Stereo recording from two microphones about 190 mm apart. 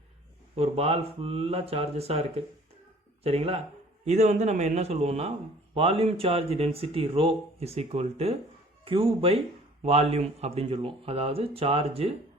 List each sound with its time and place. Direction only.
0.5 s speech: 30° right (ahead or behind)